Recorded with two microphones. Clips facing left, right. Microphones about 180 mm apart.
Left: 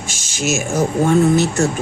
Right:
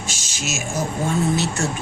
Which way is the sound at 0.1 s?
55° left (ahead or behind).